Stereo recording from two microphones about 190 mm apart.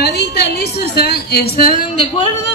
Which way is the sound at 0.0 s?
60° left (ahead or behind).